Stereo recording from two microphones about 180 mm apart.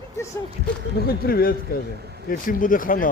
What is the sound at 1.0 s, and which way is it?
Speech, 55° left (ahead or behind).